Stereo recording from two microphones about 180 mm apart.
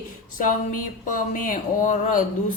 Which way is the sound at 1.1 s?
50° left (ahead or behind).